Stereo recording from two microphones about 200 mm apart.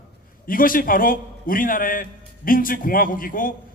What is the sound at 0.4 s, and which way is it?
A man's voice, 45° left (ahead or behind).